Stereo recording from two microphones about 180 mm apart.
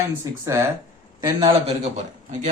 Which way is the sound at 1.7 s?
40° right (ahead or behind).